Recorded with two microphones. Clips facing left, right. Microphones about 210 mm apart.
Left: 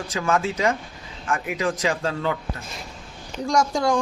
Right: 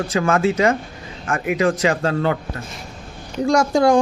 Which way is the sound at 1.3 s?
65° right (ahead or behind).